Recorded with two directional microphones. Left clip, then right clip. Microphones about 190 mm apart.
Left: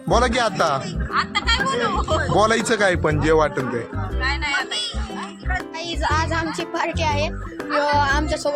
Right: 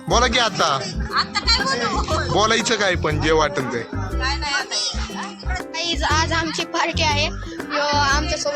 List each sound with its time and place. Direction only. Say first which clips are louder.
0.1 s speech: right 1 dB; 10° left (ahead or behind)
5.8 s music: right 3 dB; centre (ahead or behind)
7.7 s music: even; 20° left (ahead or behind)